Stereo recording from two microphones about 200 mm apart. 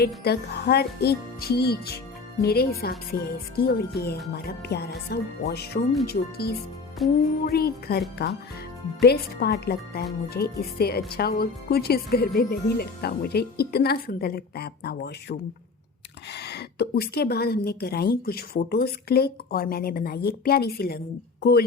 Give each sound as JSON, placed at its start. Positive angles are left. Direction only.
{"t": 0.3, "sound": "a woman's voice", "side_deg": 55}
{"t": 7.0, "sound": "music", "side_deg": 0}
{"t": 7.4, "sound": "a woman's voice", "side_deg": 50}